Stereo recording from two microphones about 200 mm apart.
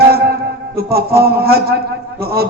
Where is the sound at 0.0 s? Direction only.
50° right (ahead or behind).